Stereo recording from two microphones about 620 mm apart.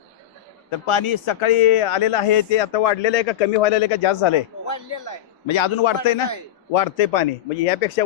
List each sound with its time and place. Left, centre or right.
0.7 s speech: left
4.7 s a sound: left
5.5 s speech: left
6.7 s speech: left